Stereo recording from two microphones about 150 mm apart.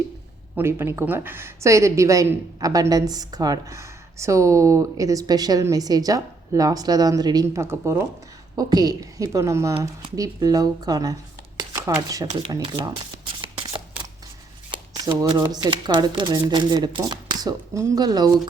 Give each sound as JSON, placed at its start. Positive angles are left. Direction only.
{"t": 0.5, "sound": "a woman's voice", "side_deg": -15}
{"t": 12.4, "sound": "shuffling cards", "side_deg": -30}
{"t": 14.7, "sound": "a woman's voice", "side_deg": -25}